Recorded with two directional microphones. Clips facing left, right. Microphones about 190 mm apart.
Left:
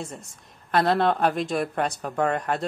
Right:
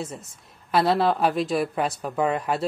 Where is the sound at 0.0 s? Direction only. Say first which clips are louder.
Right 2 dB; centre (ahead or behind).